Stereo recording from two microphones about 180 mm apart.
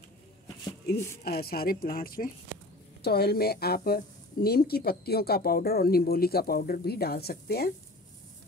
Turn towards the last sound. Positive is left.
turn(degrees=60)  # may be behind; listen again after turning